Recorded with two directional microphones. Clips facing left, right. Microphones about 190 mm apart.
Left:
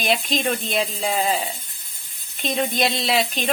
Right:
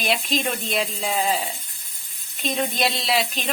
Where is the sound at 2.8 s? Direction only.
Centre (ahead or behind).